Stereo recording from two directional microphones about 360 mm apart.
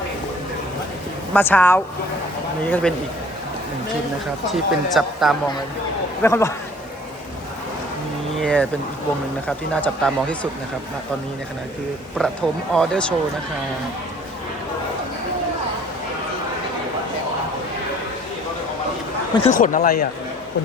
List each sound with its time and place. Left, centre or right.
1.3 s speech: centre
4.5 s speech: centre
8.4 s speech: centre
12.7 s speech: centre
19.4 s speech: left